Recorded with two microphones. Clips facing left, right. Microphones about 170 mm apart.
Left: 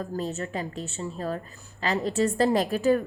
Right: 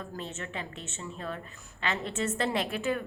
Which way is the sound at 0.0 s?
35° left (ahead or behind).